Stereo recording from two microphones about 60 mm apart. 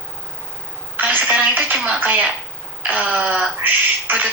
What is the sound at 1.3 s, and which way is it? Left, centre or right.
Speech, right.